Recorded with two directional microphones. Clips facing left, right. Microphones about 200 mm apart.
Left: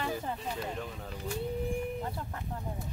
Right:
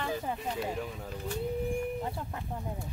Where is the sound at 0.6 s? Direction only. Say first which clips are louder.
Right 3 dB; 5° right (ahead or behind).